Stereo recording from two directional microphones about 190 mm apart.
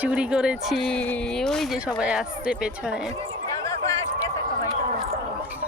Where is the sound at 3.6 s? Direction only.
15° left (ahead or behind).